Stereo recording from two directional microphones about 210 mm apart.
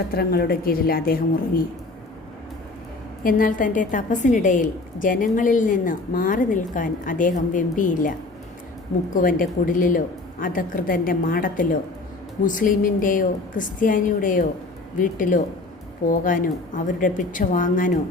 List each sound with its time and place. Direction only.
0.1 s speech: 45° left (ahead or behind)
3.2 s a woman's voice: 40° left (ahead or behind)
9.1 s a woman's voice: 40° left (ahead or behind)